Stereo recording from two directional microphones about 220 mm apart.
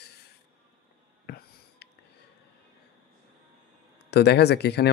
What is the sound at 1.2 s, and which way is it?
Wheeze, 45° left (ahead or behind).